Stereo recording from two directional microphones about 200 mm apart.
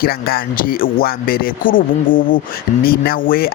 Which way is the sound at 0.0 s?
50° left (ahead or behind).